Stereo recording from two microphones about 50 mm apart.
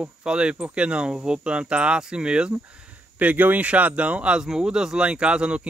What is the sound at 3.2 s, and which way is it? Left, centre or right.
Speech, right.